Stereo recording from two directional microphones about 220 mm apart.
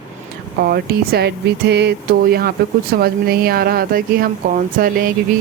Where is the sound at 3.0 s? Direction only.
45° right (ahead or behind).